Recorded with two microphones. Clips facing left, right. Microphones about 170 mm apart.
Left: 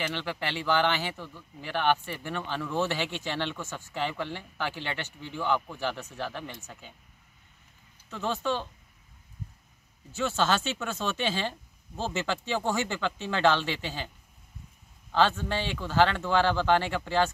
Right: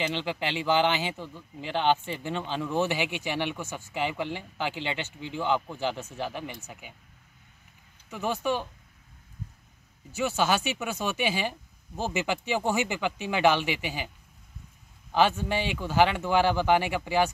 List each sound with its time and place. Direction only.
0.0 s speech: 15° right (ahead or behind)
8.1 s speech: 15° right (ahead or behind)
10.1 s speech: 15° right (ahead or behind)
15.1 s speech: 15° right (ahead or behind)